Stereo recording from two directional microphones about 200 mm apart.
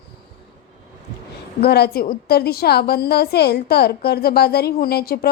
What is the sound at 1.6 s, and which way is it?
A woman's voice, 55° left (ahead or behind).